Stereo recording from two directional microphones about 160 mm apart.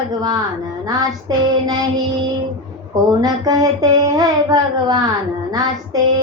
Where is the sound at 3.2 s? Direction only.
25° right (ahead or behind).